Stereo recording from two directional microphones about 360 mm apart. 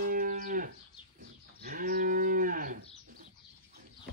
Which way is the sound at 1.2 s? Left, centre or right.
Right.